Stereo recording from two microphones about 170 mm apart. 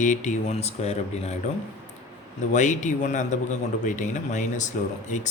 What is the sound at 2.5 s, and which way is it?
A man's voice, 45° left (ahead or behind).